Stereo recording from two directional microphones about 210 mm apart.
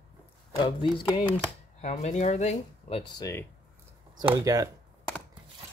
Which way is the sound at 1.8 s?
35° left (ahead or behind).